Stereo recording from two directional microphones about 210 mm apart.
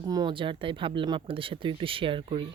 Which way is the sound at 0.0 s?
20° right (ahead or behind).